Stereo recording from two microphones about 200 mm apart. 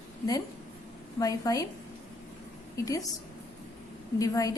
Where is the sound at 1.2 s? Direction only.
15° left (ahead or behind).